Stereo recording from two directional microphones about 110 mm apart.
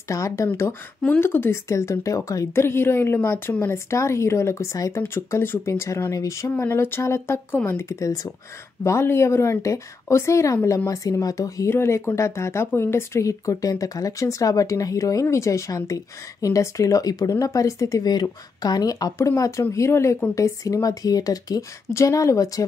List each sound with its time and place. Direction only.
0.1 s speech: 30° left (ahead or behind)
1.0 s speech: 15° left (ahead or behind)